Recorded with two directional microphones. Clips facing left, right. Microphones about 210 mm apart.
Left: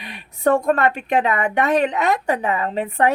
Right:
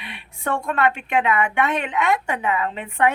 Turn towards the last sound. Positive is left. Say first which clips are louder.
# left 3 dB
turn(degrees=35)  # may be behind; listen again after turning